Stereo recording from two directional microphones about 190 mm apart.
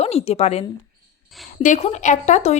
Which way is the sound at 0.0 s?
35° left (ahead or behind).